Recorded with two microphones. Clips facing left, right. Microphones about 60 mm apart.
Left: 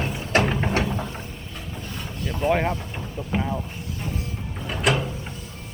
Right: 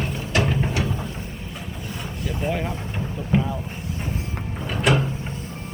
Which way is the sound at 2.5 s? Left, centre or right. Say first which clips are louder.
Left 5 dB; left.